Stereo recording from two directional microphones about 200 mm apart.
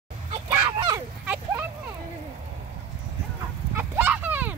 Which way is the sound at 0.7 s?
20° right (ahead or behind).